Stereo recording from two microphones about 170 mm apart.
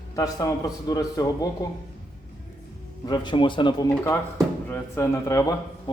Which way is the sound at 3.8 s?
15° left (ahead or behind).